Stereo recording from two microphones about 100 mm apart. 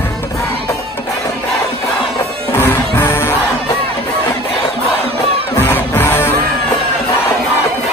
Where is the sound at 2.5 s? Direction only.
25° left (ahead or behind).